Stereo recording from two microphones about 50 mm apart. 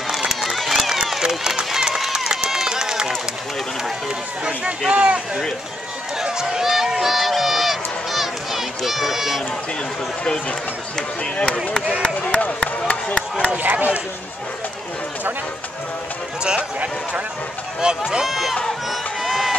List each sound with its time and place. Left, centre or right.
0.4 s run: centre
4.5 s speech: centre
6.1 s run: centre
12.0 s speech: left
13.6 s speech: right
16.4 s speech: right
18.2 s speech: centre
18.9 s crowd: centre